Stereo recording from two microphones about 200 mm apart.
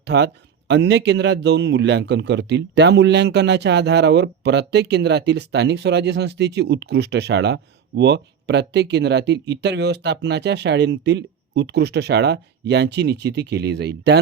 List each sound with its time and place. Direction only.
0.0 s a man's voice: 55° right (ahead or behind)